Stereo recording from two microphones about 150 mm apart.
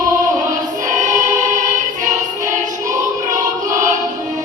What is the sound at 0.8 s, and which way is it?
Choir, 55° right (ahead or behind).